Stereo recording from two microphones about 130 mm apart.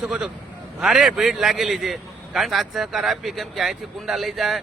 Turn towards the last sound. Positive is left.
turn(degrees=0)  # may be behind; listen again after turning